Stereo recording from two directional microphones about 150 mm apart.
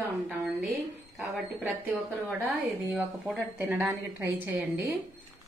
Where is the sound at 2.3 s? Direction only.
10° right (ahead or behind).